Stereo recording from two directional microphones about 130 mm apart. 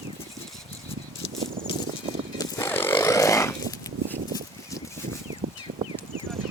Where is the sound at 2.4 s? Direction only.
20° left (ahead or behind).